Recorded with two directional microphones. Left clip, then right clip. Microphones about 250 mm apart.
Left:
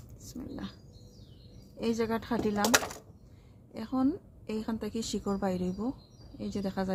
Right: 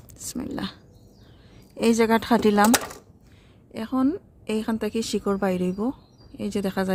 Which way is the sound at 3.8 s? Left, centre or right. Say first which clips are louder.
Right 6 dB; right.